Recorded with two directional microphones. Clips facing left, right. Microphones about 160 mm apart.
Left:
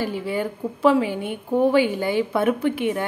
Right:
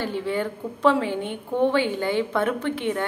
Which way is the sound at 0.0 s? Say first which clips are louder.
Left 1 dB; 10° left (ahead or behind).